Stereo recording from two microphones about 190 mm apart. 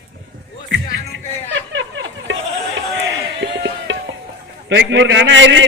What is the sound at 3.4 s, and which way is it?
Music, 70° right (ahead or behind).